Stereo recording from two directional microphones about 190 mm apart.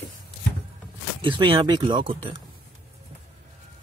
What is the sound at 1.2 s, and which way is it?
Speech, 25° right (ahead or behind).